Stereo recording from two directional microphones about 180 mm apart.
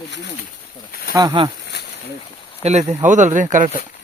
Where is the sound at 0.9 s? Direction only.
55° left (ahead or behind).